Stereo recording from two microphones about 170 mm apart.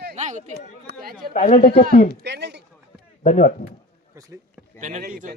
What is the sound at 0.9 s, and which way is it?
Speech, 75° right (ahead or behind).